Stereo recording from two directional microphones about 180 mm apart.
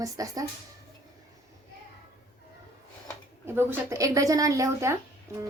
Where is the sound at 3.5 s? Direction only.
15° right (ahead or behind).